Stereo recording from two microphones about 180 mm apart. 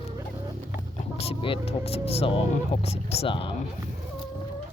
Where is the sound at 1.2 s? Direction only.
30° left (ahead or behind).